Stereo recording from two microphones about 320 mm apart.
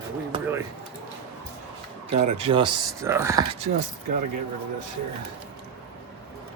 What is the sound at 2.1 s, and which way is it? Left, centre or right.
Speech, centre.